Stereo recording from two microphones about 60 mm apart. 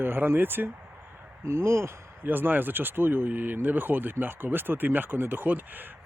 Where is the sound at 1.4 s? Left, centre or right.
Right.